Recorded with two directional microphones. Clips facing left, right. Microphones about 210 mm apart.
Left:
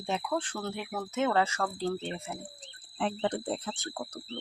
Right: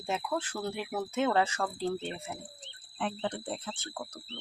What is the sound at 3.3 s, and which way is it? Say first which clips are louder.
Speech: left 4 dB; 35° left (ahead or behind).